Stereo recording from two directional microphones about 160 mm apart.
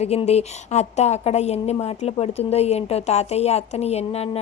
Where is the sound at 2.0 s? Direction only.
40° left (ahead or behind).